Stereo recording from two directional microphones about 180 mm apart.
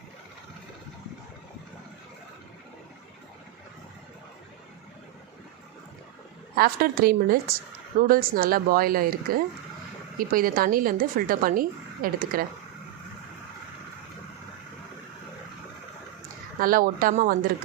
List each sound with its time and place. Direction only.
6.6 s a woman's voice: 55° right (ahead or behind)
16.6 s a woman's voice: 50° right (ahead or behind)